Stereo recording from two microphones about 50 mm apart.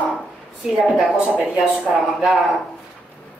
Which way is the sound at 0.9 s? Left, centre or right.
Centre.